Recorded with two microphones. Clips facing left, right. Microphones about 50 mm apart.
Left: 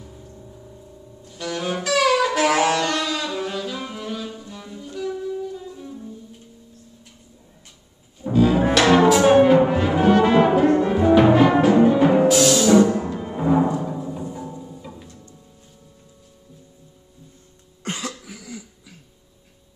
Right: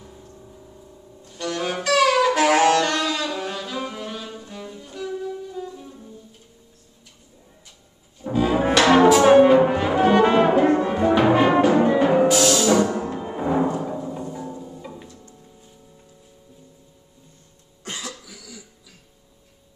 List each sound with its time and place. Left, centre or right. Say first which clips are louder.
1.2 s saxophone: right 1 dB; centre
3.3 s music: left 1 dB; centre
8.2 s music: left 3 dB; centre
9.3 s brass instrument: right 1 dB; centre
10.9 s music: left 3 dB; centre
13.2 s timpani: left 3 dB; centre
14.6 s music: right 1 dB; centre
17.8 s cough: left 4 dB; left